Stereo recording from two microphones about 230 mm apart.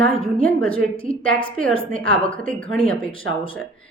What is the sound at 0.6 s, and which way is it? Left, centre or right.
Speech, left.